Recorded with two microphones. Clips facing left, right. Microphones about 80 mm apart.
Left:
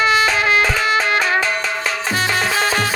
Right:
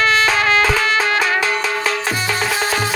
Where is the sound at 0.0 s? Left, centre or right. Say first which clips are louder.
Even; centre.